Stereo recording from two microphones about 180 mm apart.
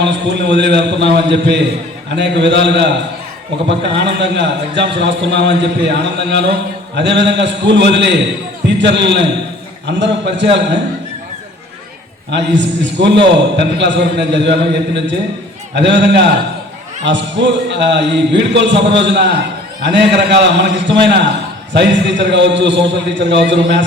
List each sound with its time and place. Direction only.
0.0 s a man's voice: 80° right
12.3 s a man's voice: 75° right (ahead or behind)
17.1 s a man's voice: 80° right